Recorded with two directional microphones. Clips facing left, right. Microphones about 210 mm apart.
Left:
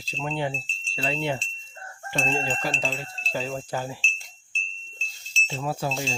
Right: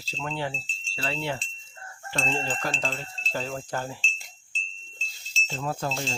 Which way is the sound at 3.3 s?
5° left (ahead or behind).